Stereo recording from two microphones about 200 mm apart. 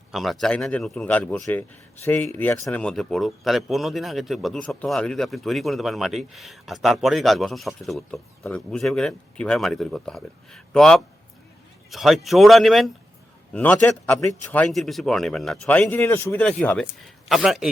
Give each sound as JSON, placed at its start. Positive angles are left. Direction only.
{"t": 0.1, "sound": "a man's voice", "side_deg": 0}